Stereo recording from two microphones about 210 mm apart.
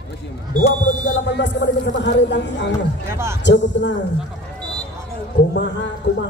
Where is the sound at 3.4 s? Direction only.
60° left (ahead or behind).